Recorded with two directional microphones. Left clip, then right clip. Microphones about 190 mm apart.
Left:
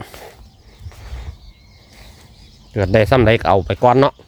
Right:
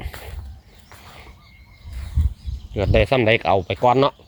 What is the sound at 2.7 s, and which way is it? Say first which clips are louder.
Speech: left 4 dB; 40° left (ahead or behind).